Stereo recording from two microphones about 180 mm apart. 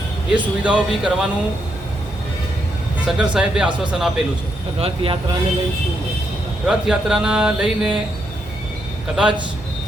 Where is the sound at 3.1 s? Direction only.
5° right (ahead or behind).